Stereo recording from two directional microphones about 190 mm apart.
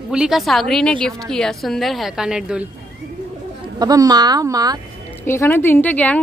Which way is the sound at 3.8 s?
20° right (ahead or behind).